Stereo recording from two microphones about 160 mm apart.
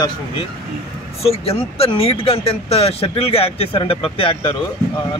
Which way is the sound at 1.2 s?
40° left (ahead or behind).